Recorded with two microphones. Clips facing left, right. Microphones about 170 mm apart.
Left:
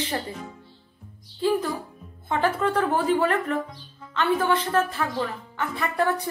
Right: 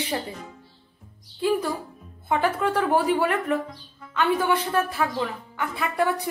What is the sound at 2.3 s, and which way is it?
A woman's voice, 10° right (ahead or behind).